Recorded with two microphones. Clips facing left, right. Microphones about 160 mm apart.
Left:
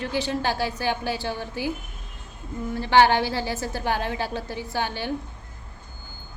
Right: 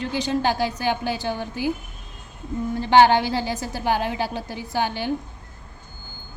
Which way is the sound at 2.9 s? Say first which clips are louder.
Right 3 dB; 20° right (ahead or behind).